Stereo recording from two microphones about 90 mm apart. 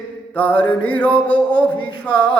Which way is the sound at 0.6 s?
15° left (ahead or behind).